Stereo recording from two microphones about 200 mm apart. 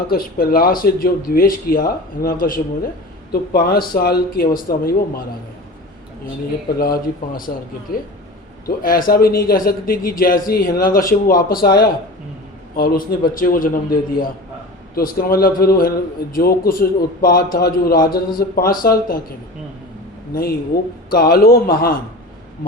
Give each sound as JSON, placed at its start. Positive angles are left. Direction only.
{"t": 0.1, "sound": "a man's voice", "side_deg": 50}
{"t": 6.7, "sound": "a man's voice", "side_deg": 50}
{"t": 14.9, "sound": "a man's voice", "side_deg": 45}
{"t": 20.7, "sound": "a man's voice", "side_deg": 50}